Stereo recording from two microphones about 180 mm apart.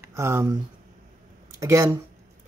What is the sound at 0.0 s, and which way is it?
Speech, 15° right (ahead or behind).